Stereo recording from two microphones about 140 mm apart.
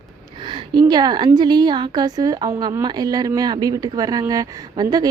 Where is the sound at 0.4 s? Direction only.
35° right (ahead or behind).